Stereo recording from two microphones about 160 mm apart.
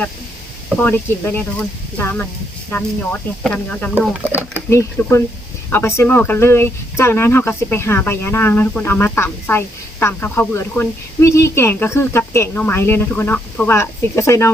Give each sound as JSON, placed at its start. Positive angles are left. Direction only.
{"t": 0.8, "sound": "speech", "side_deg": 15}
{"t": 4.2, "sound": "speech", "side_deg": -10}
{"t": 4.7, "sound": "speech", "side_deg": 15}